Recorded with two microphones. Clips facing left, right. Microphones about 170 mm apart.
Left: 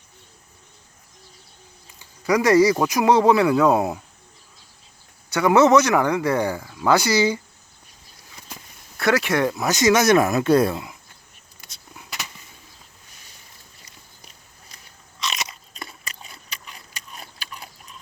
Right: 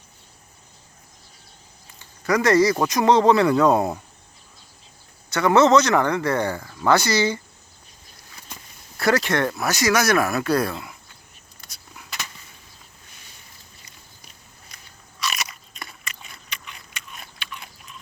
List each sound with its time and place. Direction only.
2.0 s speech: 10° left (ahead or behind)
5.3 s speech: 10° left (ahead or behind)
9.0 s speech: centre (ahead or behind); by 10.9 s 20° left (ahead or behind)
14.7 s biting: 30° left (ahead or behind)